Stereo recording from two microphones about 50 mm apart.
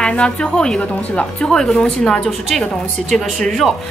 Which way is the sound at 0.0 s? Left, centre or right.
Centre.